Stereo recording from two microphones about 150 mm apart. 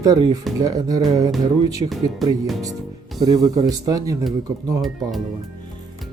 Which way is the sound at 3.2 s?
25° right (ahead or behind).